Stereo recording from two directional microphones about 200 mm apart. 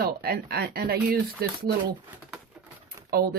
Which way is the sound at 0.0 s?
50° right (ahead or behind).